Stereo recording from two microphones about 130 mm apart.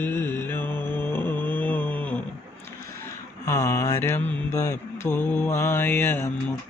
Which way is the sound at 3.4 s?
25° left (ahead or behind).